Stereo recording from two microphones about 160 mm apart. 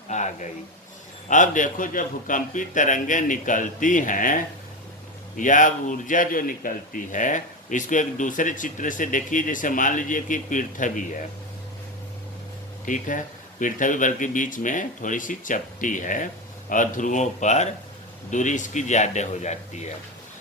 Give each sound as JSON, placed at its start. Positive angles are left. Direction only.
{"t": 0.1, "sound": "a man's voice", "side_deg": 50}
{"t": 5.4, "sound": "a man's voice", "side_deg": 55}
{"t": 12.8, "sound": "a man's voice", "side_deg": 55}